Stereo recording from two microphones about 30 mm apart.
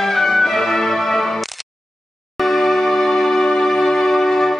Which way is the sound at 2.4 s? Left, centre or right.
Centre.